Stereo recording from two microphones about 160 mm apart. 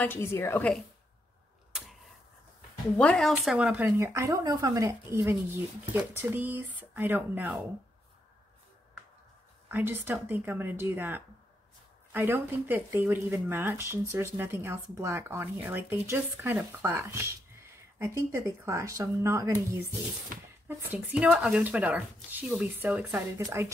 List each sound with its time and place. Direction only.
0.0 s a woman's voice: 15° left (ahead or behind)
1.7 s a sound: centre (ahead or behind)
3.0 s speech: 5° left (ahead or behind); by 7.6 s 10° right (ahead or behind)
9.7 s speech: 15° right (ahead or behind)